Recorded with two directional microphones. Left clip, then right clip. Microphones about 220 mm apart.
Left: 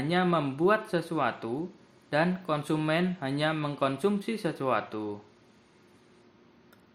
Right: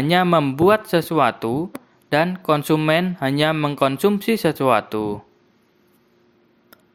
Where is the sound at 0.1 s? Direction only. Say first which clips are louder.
Right 11 dB; 35° right (ahead or behind).